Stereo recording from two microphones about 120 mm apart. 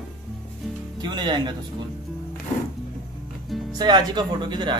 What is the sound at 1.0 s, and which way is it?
Speech, 40° right (ahead or behind).